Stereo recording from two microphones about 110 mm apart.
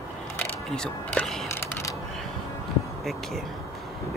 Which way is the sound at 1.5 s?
25° left (ahead or behind).